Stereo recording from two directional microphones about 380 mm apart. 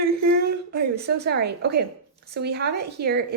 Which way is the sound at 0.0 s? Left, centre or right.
Right.